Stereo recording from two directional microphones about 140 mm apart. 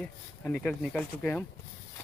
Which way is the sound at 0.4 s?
5° left (ahead or behind).